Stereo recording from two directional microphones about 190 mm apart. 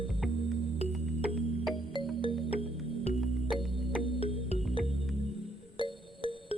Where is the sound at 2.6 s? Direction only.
35° left (ahead or behind).